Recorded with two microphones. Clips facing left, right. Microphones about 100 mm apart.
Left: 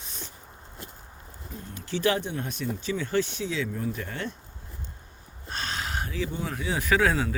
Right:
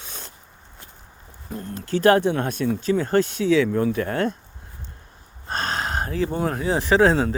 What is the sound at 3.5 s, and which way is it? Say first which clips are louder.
Speech: right 12 dB; 75° right (ahead or behind).